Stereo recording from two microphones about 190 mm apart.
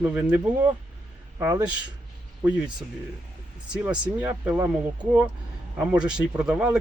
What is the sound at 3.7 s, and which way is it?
Speech, 5° right (ahead or behind).